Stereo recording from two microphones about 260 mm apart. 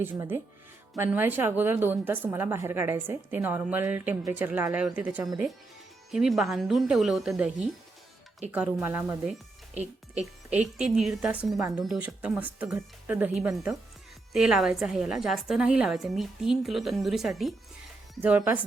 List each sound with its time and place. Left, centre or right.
0.0 s a woman's voice: centre
9.7 s a woman's voice: right
10.8 s a woman's voice: centre